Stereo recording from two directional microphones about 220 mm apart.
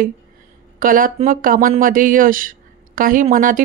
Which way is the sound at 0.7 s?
40° right (ahead or behind).